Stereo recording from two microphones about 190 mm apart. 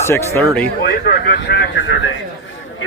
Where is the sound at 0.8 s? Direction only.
55° left (ahead or behind).